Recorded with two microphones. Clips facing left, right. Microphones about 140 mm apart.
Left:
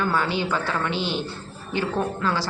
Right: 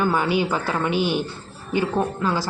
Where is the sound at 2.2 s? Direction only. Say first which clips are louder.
Right 2 dB; 15° right (ahead or behind).